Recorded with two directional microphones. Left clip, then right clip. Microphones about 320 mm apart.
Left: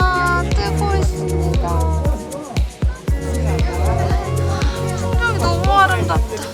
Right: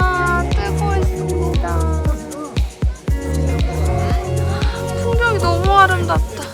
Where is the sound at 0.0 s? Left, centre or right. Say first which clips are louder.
Even; centre.